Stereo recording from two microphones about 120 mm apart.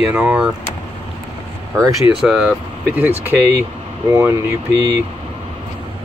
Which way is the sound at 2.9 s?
15° right (ahead or behind).